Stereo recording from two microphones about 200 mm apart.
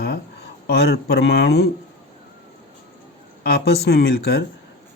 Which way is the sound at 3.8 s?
55° left (ahead or behind).